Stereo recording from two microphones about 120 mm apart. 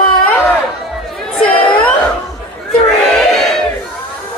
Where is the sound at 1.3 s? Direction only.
5° left (ahead or behind).